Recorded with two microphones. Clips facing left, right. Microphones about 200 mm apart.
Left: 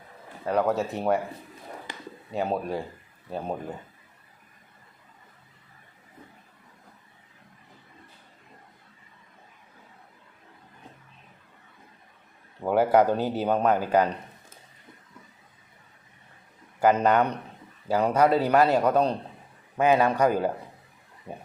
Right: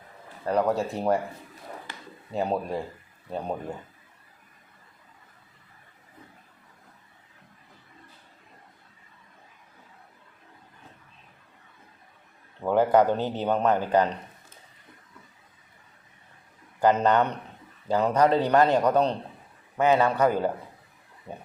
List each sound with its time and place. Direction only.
0.4 s speech: centre (ahead or behind)
1.9 s a sound: 15° left (ahead or behind)
2.3 s speech: centre (ahead or behind)
12.6 s speech: 10° left (ahead or behind)
16.8 s speech: 10° left (ahead or behind)